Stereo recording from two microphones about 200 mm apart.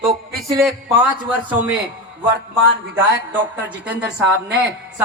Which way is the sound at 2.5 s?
10° right (ahead or behind).